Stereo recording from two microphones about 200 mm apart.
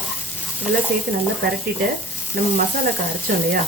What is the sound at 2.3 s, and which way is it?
Speech, 50° right (ahead or behind).